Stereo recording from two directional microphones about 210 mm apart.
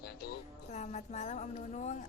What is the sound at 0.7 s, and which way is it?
A woman's voice, 35° left (ahead or behind).